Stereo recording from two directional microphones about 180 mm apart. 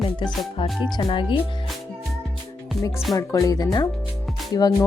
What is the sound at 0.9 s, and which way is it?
Speech, 30° left (ahead or behind).